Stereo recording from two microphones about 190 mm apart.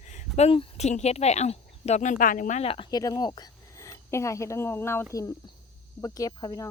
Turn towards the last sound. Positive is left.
turn(degrees=20)  # may be behind; listen again after turning